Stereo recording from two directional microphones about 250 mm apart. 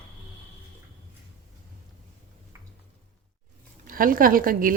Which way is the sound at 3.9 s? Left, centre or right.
Right.